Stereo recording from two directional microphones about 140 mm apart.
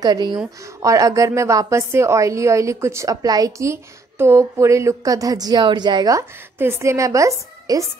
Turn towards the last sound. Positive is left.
turn(degrees=-25)  # may be behind; listen again after turning